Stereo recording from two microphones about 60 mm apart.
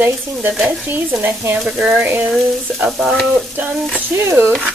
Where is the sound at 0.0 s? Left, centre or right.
Right.